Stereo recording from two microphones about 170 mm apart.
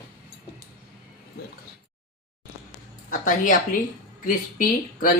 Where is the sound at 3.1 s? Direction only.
55° left (ahead or behind).